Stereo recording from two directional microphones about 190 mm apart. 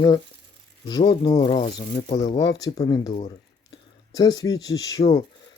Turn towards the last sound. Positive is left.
turn(degrees=20)  # may be behind; listen again after turning